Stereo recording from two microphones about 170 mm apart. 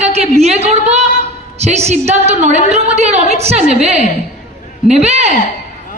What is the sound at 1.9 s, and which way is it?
Speech, 40° right (ahead or behind).